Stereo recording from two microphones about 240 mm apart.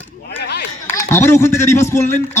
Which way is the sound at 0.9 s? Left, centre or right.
Centre.